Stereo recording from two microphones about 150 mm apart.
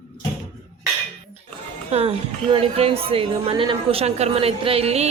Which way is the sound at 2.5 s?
40° right (ahead or behind).